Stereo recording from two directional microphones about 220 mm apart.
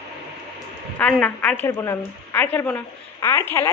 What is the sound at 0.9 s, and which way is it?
A woman's voice, 5° left (ahead or behind).